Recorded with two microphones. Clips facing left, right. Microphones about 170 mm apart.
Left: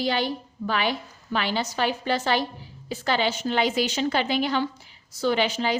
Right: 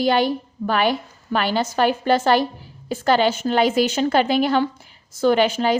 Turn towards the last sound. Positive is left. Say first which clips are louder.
# right 6 dB
turn(degrees=-50)  # may be behind; listen again after turning